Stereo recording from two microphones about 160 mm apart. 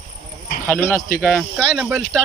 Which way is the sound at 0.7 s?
15° left (ahead or behind).